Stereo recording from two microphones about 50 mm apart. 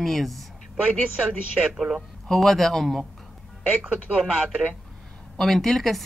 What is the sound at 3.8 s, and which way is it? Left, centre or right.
Speech, right.